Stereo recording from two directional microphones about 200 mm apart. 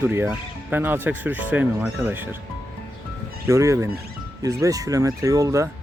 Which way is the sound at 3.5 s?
15° right (ahead or behind).